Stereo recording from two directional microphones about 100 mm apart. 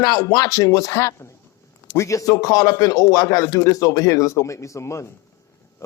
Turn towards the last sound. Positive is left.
turn(degrees=30)  # may be behind; listen again after turning